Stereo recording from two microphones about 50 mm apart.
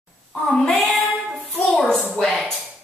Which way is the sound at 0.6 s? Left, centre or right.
Centre.